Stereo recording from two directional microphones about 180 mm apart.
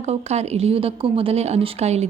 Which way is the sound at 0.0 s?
35° right (ahead or behind).